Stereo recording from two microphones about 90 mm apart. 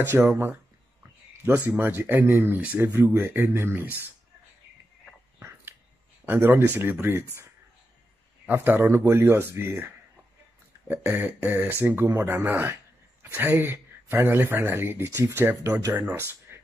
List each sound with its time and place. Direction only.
0.1 s speech: 20° right (ahead or behind)
6.2 s speech: 20° right (ahead or behind)
8.5 s speech: 20° right (ahead or behind)